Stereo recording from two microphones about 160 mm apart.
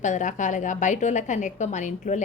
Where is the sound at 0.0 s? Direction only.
50° left (ahead or behind).